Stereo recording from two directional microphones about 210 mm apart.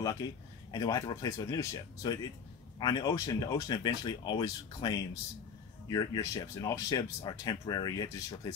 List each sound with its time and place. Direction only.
0.2 s speech: 15° left (ahead or behind)